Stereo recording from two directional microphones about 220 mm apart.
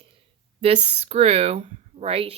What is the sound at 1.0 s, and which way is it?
Speech, 30° right (ahead or behind).